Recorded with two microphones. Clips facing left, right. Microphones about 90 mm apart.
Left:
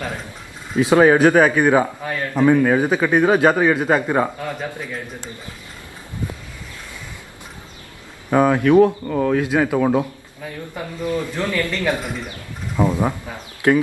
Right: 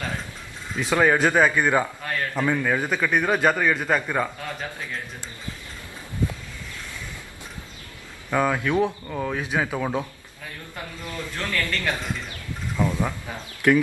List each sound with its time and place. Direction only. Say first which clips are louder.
0.7 s a man's voice: left 7 dB; 20° left (ahead or behind)
8.3 s a man's voice: left 8 dB; 15° left (ahead or behind)
9.2 s a man's voice: left 8 dB; 5° left (ahead or behind); by 13.1 s 25° left (ahead or behind)